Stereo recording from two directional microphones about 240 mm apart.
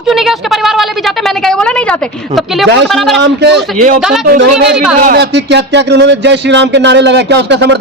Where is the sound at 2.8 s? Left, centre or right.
Centre.